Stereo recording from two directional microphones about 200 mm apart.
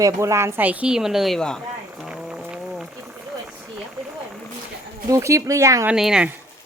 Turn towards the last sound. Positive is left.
turn(degrees=-5)  # may be behind; listen again after turning